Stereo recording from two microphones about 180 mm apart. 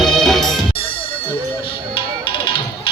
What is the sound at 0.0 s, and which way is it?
Music, centre (ahead or behind).